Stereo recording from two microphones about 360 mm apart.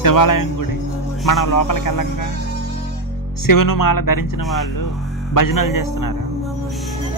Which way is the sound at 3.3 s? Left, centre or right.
Left.